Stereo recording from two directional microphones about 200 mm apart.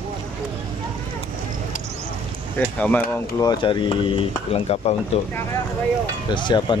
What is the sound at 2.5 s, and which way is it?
Speech, 5° left (ahead or behind).